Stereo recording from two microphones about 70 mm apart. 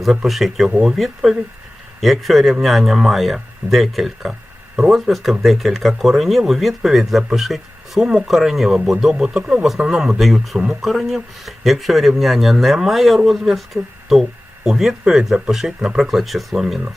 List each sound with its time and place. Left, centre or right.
0.0 s speech: centre